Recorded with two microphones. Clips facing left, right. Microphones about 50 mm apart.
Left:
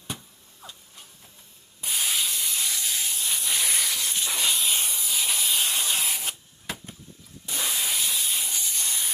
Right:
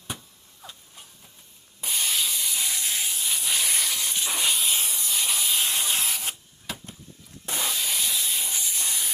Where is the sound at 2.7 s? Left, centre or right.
Right.